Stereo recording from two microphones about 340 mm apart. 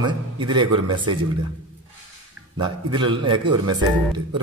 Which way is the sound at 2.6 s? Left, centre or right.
Centre.